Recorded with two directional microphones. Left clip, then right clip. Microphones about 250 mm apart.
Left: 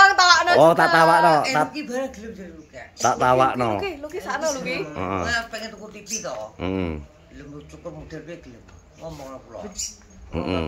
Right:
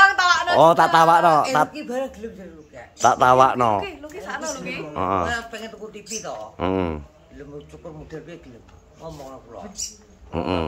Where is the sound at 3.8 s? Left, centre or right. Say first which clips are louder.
Left 4 dB; left.